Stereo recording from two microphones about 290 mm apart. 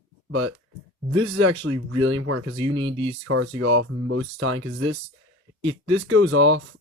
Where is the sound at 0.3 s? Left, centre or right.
Right.